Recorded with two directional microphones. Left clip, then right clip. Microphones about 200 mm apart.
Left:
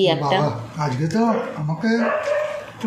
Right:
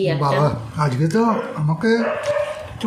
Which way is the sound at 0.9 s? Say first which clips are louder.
Right 2 dB; 45° right (ahead or behind).